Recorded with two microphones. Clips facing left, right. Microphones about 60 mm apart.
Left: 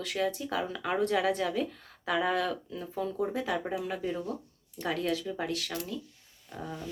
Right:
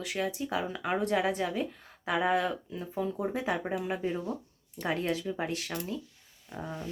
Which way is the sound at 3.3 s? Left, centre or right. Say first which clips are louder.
Even; right.